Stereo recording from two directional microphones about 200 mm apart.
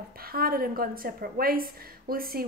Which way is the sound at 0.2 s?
50° right (ahead or behind).